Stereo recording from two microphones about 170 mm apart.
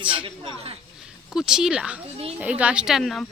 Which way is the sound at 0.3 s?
35° right (ahead or behind).